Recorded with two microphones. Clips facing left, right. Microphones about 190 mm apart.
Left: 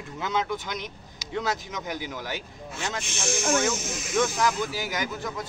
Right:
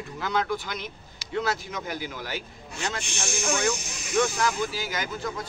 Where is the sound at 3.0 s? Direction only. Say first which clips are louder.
Left 2 dB; centre (ahead or behind).